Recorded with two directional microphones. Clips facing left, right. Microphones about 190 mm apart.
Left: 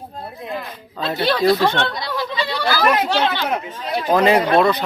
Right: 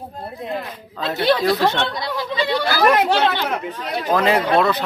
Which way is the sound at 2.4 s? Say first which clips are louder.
Right 2 dB; 15° right (ahead or behind).